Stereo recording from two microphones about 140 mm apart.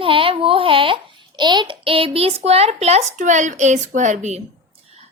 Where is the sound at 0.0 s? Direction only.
40° right (ahead or behind).